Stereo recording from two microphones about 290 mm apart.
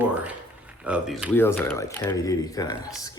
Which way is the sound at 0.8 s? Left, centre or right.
Centre.